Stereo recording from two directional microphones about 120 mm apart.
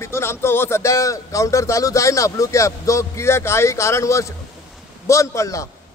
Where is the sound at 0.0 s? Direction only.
20° left (ahead or behind).